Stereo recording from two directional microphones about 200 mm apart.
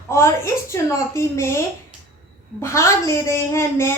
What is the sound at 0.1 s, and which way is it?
A woman's voice, 15° left (ahead or behind).